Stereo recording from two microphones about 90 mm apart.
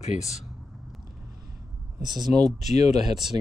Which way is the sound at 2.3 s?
Centre (ahead or behind).